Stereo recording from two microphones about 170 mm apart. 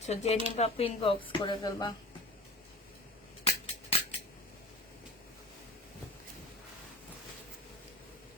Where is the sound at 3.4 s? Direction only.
35° left (ahead or behind).